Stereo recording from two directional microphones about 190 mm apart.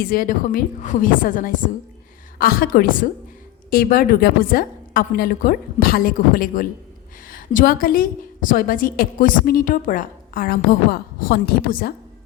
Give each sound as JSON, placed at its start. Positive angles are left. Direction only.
{"t": 0.0, "sound": "a woman's voice", "side_deg": 50}